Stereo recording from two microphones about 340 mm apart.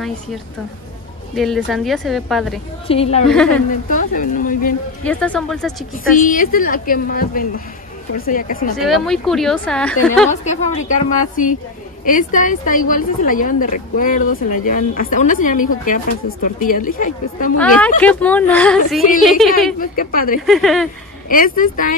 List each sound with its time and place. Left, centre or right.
1.3 s speech: centre
2.9 s a woman's voice: centre
3.3 s speech: centre
3.9 s speech: left
5.0 s speech: centre
6.1 s speech: left
8.8 s speech: centre
10.4 s speech: left
17.6 s speech: centre
19.8 s speech: left
20.4 s speech: centre
21.3 s speech: left